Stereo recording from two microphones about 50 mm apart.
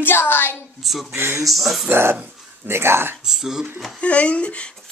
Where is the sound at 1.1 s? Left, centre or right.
Right.